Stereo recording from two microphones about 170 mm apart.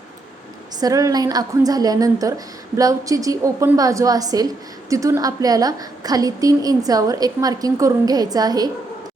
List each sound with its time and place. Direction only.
0.8 s a woman's voice: 20° right (ahead or behind)